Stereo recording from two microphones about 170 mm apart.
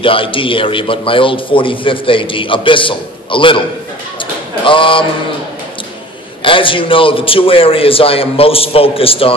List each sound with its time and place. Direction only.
0.0 s a man's voice: 30° left (ahead or behind)
4.6 s speech: 30° left (ahead or behind)
6.4 s a man's voice: 30° left (ahead or behind)